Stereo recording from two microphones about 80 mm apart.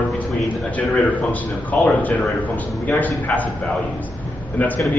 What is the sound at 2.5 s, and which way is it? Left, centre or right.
Speech, left.